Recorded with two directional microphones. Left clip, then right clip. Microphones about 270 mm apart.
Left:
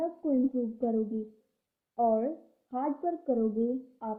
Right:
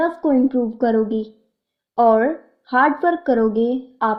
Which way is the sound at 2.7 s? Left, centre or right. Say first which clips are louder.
Right 16 dB; right.